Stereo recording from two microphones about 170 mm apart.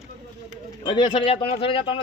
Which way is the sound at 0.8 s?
30° left (ahead or behind).